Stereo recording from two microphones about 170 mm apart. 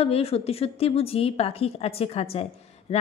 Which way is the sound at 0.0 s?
35° left (ahead or behind).